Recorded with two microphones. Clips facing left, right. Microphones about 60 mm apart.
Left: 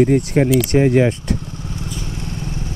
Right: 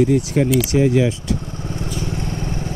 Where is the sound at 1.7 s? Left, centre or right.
Right.